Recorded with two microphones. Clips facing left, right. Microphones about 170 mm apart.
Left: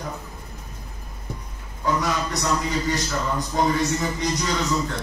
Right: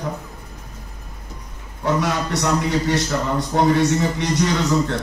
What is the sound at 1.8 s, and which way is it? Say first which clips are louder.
A man's voice: right 3 dB; 70° right (ahead or behind).